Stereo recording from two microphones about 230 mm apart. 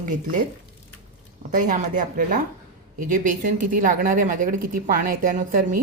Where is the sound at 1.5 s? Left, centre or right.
Right.